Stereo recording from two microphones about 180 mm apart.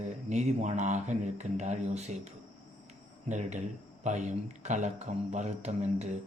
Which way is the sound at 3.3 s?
40° right (ahead or behind).